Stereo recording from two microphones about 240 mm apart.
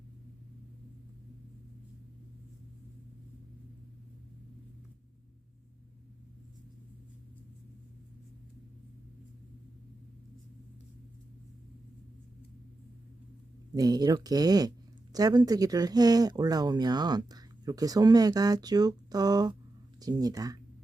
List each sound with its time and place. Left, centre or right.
13.7 s speech: centre